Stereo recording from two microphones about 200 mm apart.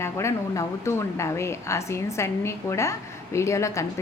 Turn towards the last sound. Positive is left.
turn(degrees=15)  # may be behind; listen again after turning